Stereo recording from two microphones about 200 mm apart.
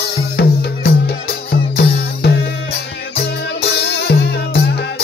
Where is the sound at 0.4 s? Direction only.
50° left (ahead or behind).